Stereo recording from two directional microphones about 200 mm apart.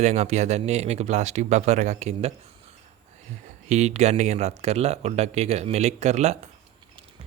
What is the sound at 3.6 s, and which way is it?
Speech, 35° right (ahead or behind).